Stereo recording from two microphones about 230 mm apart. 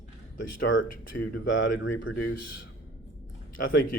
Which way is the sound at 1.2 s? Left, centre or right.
Left.